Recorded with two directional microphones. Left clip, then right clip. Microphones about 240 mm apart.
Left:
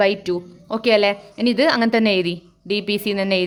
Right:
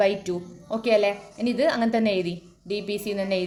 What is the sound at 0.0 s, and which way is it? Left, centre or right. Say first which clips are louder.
A woman's voice: left 4 dB; left.